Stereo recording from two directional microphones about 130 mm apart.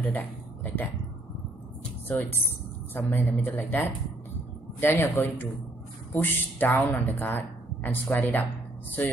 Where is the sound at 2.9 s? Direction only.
15° left (ahead or behind).